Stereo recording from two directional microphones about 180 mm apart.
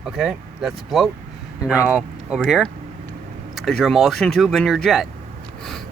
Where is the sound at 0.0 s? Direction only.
5° right (ahead or behind).